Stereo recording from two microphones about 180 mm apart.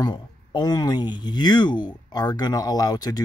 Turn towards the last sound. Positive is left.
turn(degrees=20)  # may be behind; listen again after turning